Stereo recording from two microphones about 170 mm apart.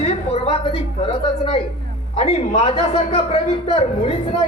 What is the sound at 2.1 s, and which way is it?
A man's voice, 35° left (ahead or behind).